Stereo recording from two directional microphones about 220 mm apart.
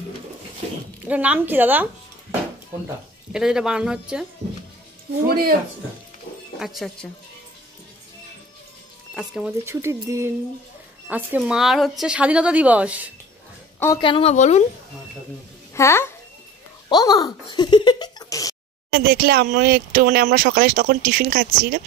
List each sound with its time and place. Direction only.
1.0 s speech: 5° right (ahead or behind)
3.3 s a woman's voice: 5° right (ahead or behind)
6.6 s a woman's voice: centre (ahead or behind)
9.1 s a woman's voice: 5° right (ahead or behind)
13.7 s speech: 15° left (ahead or behind)
15.7 s a child's voice: 10° left (ahead or behind)
18.9 s speech: 45° right (ahead or behind)